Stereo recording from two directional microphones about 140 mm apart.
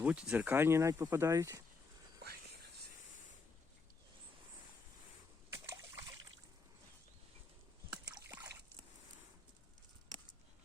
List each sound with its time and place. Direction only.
0.0 s speech: 10° right (ahead or behind)
5.7 s trickle: 25° right (ahead or behind)
8.3 s trickle: 15° right (ahead or behind)